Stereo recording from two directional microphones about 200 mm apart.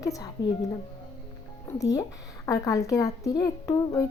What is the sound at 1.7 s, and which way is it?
A woman's voice, 15° left (ahead or behind).